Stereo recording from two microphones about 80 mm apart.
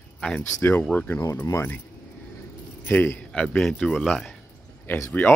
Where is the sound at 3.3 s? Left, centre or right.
Centre.